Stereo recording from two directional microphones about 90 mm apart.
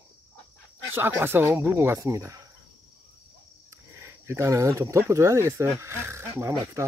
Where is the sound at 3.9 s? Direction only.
30° right (ahead or behind).